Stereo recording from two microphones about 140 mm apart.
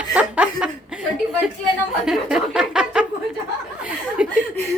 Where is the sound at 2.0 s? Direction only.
5° right (ahead or behind).